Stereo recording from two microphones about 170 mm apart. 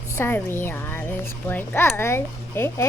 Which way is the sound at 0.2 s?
15° left (ahead or behind).